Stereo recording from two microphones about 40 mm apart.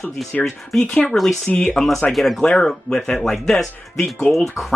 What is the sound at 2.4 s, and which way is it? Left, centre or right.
Speech, left.